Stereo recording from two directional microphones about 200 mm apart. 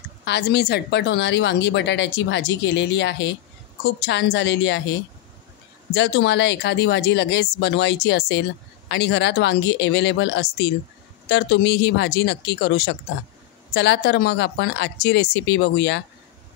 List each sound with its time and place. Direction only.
0.2 s speech: 55° left (ahead or behind)
5.9 s speech: 60° left (ahead or behind)